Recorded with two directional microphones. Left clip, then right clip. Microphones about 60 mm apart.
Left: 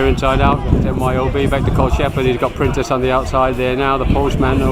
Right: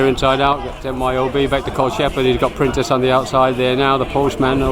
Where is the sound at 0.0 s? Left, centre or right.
Centre.